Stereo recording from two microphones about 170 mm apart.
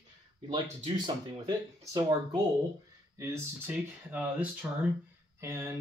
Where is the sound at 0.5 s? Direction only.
25° right (ahead or behind).